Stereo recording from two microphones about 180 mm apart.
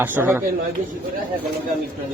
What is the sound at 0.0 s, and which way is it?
Speech, 10° right (ahead or behind).